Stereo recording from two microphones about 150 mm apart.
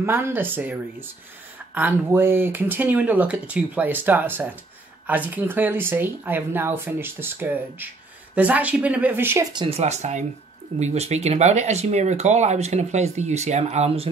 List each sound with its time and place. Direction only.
0.0 s speech: 15° right (ahead or behind)
9.5 s speech: 30° right (ahead or behind)
9.8 s speech: 50° right (ahead or behind)